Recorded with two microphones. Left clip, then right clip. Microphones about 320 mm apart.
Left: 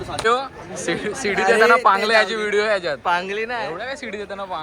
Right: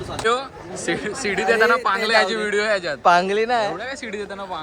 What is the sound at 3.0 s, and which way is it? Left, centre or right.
Speech, right.